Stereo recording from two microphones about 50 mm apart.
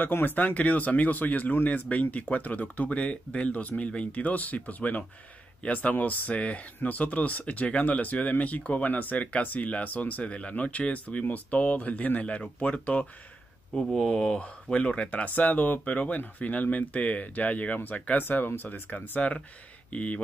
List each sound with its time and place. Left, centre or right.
0.0 s speech: left
13.7 s speech: centre; by 20.2 s left